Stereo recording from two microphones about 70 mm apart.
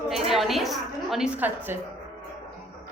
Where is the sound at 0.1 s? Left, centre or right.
Centre.